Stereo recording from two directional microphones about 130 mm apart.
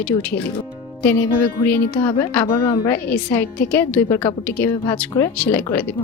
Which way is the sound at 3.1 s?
15° left (ahead or behind).